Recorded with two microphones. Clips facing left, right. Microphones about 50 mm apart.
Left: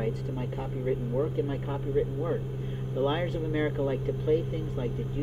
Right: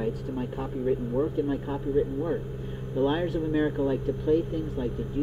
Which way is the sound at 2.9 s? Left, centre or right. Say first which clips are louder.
Right 3 dB; centre.